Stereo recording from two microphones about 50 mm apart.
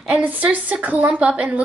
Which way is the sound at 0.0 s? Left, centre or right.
Right.